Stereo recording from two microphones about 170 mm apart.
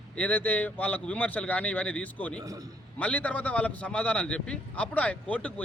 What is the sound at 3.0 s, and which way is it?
Speech, 10° left (ahead or behind).